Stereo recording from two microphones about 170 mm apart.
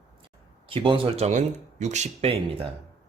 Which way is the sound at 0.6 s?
30° right (ahead or behind).